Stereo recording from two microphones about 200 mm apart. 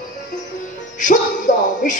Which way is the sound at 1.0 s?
40° left (ahead or behind).